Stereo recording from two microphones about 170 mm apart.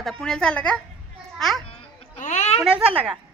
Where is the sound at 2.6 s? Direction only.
5° right (ahead or behind).